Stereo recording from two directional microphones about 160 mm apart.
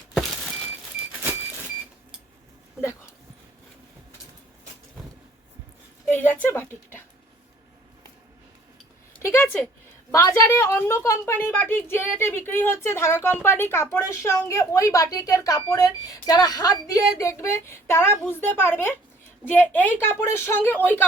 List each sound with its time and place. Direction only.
0.1 s vehicle: centre (ahead or behind)
6.1 s a woman's voice: 10° left (ahead or behind)
9.2 s a woman's voice: 15° left (ahead or behind)